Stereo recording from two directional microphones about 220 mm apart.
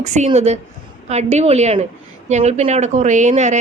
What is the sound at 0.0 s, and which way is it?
A woman's voice, 30° right (ahead or behind).